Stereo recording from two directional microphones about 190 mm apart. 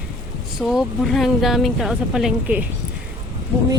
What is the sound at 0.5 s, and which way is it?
Speech, centre (ahead or behind).